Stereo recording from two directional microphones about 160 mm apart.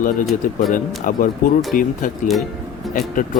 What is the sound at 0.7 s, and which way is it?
Speech, 60° left (ahead or behind).